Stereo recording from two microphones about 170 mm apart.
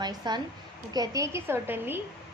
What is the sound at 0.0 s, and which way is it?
A woman's voice, 25° right (ahead or behind).